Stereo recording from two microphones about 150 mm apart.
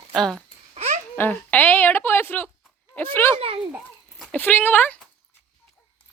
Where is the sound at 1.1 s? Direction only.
10° left (ahead or behind).